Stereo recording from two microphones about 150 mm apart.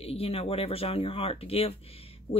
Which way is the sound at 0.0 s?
40° left (ahead or behind).